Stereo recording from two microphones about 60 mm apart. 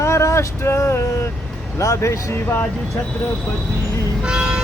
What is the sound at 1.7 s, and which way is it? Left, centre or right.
Speech, left.